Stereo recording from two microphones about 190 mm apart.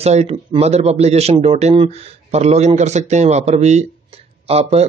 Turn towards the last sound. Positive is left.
turn(degrees=-35)  # may be behind; listen again after turning